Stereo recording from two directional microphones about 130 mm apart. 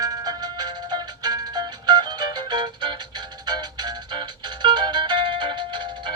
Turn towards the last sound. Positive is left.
turn(degrees=-35)  # may be behind; listen again after turning